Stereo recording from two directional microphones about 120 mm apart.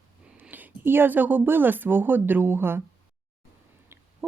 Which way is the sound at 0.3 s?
15° right (ahead or behind).